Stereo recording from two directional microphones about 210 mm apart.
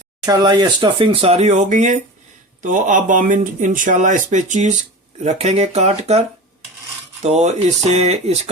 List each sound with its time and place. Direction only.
0.3 s speech: 20° right (ahead or behind)